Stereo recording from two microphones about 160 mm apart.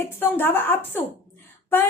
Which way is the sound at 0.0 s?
15° left (ahead or behind).